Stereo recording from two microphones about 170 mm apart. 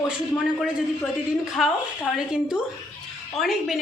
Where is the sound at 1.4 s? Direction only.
Centre (ahead or behind).